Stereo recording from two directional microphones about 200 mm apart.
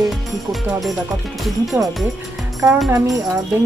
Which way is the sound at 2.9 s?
15° right (ahead or behind).